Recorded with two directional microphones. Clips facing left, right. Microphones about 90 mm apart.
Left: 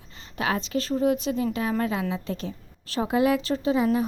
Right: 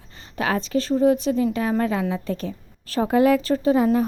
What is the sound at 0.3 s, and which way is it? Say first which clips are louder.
A woman's voice: right 4 dB; 40° right (ahead or behind).